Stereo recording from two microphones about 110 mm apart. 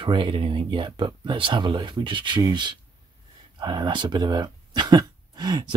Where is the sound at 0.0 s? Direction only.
50° right (ahead or behind).